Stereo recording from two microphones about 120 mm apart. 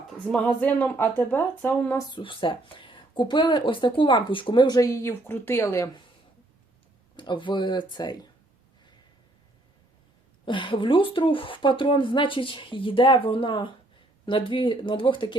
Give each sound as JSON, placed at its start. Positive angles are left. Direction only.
{"t": 0.3, "sound": "speech", "side_deg": 10}
{"t": 2.0, "sound": "speech", "side_deg": 40}
{"t": 7.2, "sound": "speech", "side_deg": 40}
{"t": 10.4, "sound": "speech", "side_deg": 45}